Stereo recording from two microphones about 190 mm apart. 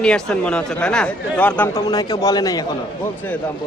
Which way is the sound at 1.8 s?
20° left (ahead or behind).